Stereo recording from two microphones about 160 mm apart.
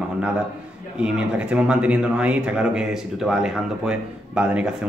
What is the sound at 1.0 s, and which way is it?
A man's voice, 5° right (ahead or behind).